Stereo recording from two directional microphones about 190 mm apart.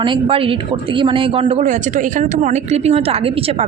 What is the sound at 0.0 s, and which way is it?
A man's voice, 25° right (ahead or behind).